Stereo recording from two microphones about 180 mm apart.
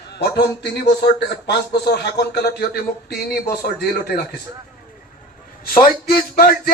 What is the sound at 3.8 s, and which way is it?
Speech, 60° left (ahead or behind).